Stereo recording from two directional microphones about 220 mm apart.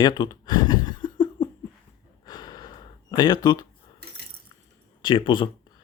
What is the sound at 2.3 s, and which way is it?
Gasp, 20° left (ahead or behind).